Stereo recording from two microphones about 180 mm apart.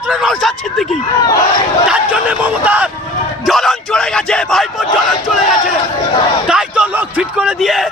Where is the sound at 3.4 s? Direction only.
Centre (ahead or behind).